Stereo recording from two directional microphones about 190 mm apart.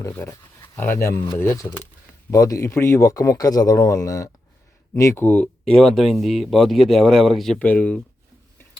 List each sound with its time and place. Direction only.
0.0 s a man's voice: 15° left (ahead or behind)